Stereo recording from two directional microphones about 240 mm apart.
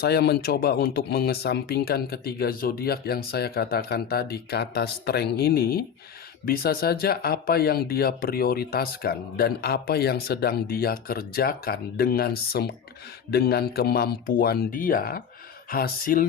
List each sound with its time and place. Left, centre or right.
0.0 s speech: left